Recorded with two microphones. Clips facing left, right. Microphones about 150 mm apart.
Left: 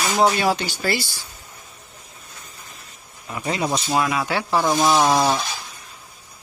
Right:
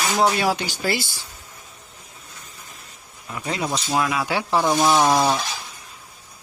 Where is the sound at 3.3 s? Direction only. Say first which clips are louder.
Left 2 dB; 5° left (ahead or behind).